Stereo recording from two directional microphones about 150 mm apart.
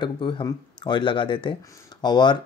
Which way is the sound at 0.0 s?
30° left (ahead or behind).